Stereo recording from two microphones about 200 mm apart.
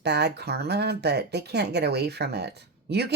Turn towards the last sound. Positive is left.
turn(degrees=-55)  # may be behind; listen again after turning